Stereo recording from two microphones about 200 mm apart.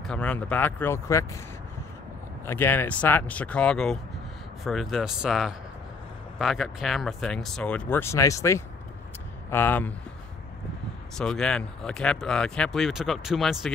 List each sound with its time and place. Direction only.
0.0 s speech: 5° left (ahead or behind)
2.4 s speech: 10° left (ahead or behind)
11.1 s speech: 5° left (ahead or behind)